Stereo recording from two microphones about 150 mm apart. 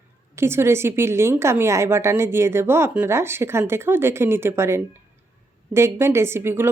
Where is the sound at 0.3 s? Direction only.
15° right (ahead or behind).